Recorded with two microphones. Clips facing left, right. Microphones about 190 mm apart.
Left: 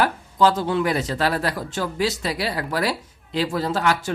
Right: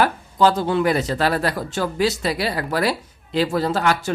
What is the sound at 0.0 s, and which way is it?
Speech, 50° right (ahead or behind).